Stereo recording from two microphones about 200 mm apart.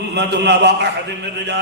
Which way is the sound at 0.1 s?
55° right (ahead or behind).